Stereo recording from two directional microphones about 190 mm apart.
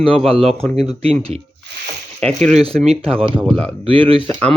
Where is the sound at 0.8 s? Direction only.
35° right (ahead or behind).